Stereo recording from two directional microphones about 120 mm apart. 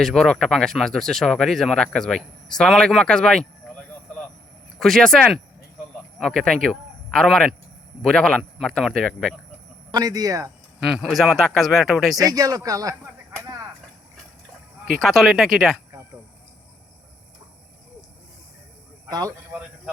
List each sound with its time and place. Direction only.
0.0 s speech: 5° left (ahead or behind)
4.8 s a man's voice: 5° left (ahead or behind)
9.9 s speech: 30° right (ahead or behind)
10.8 s speech: 5° right (ahead or behind)
12.1 s speech: 30° right (ahead or behind)
15.0 s speech: centre (ahead or behind)
19.0 s a man's voice: 30° right (ahead or behind)